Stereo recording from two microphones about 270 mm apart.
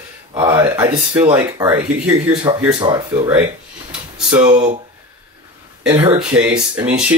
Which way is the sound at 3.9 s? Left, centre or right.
Centre.